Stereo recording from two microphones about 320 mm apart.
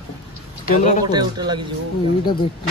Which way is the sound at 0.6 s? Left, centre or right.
Left.